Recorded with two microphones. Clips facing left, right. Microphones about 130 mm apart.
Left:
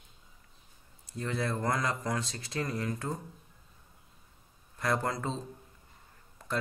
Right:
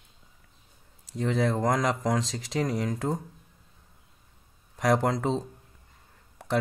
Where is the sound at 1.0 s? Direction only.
90° right.